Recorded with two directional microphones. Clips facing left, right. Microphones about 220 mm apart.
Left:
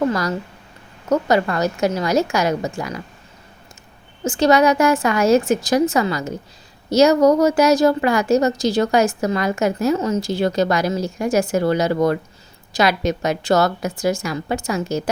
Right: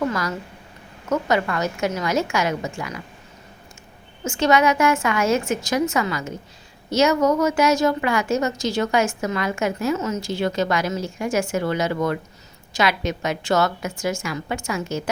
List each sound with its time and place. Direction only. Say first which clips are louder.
0.0 s a woman's voice: left 4 dB; 35° left (ahead or behind)
4.2 s a woman's voice: left 4 dB; 35° left (ahead or behind)